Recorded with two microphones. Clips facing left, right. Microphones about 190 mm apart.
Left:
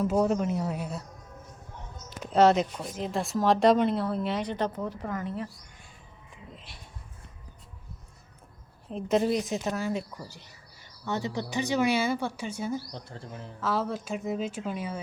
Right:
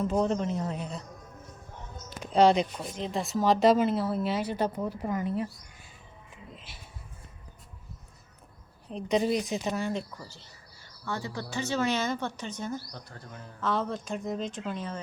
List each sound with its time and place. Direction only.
0.0 s a woman's voice: 5° left (ahead or behind)
2.2 s speech: centre (ahead or behind)
6.5 s a sound: centre (ahead or behind)
8.9 s speech: 5° left (ahead or behind)
10.2 s a woman's voice: 15° left (ahead or behind)
12.9 s speech: 25° left (ahead or behind)
13.6 s a woman's voice: 5° left (ahead or behind)